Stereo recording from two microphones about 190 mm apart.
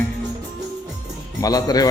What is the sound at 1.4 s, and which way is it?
Speech, 20° left (ahead or behind).